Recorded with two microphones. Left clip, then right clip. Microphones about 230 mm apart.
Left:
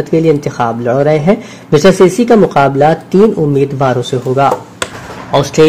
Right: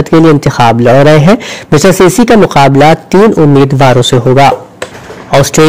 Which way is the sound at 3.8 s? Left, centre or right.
Right.